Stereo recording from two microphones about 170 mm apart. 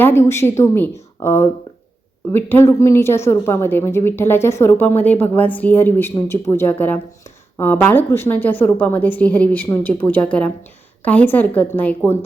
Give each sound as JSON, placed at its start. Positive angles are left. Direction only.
{"t": 0.0, "sound": "speech", "side_deg": 15}